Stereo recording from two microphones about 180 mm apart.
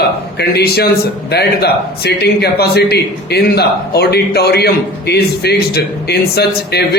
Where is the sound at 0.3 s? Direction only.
60° left (ahead or behind).